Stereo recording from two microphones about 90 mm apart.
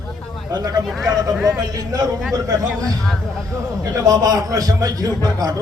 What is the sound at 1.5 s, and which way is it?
Speech, 45° right (ahead or behind).